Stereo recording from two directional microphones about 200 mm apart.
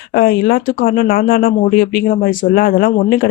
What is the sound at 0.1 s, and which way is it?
Speech, 50° left (ahead or behind).